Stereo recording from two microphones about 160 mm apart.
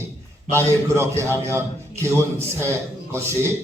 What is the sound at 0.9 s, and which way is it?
Speech, 15° right (ahead or behind).